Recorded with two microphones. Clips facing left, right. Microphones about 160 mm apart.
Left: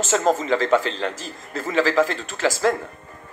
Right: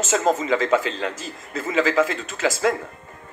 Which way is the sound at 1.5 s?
35° left (ahead or behind).